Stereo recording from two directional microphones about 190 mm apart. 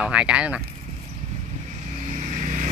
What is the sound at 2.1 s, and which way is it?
Vehicle, 40° right (ahead or behind).